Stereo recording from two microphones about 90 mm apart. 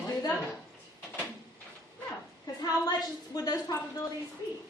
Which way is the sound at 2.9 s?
45° left (ahead or behind).